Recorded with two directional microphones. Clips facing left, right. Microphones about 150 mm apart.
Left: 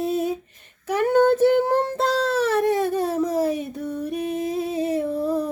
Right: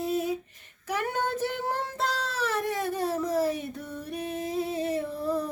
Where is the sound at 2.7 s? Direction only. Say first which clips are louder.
Left 7 dB; 25° left (ahead or behind).